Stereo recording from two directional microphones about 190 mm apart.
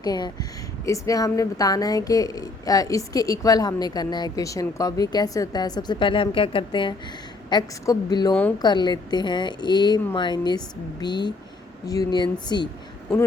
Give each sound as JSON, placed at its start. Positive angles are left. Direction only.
{"t": 0.0, "sound": "a woman's voice", "side_deg": 20}